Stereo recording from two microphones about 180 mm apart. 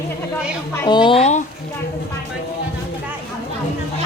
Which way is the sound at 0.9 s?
25° left (ahead or behind).